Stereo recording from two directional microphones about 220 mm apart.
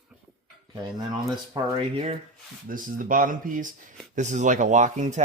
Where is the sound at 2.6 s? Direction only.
40° right (ahead or behind).